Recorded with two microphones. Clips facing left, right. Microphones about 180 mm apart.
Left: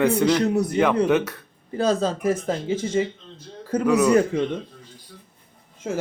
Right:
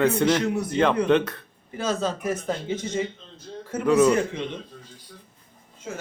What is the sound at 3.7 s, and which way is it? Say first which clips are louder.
Speech: left 6 dB; 35° left (ahead or behind).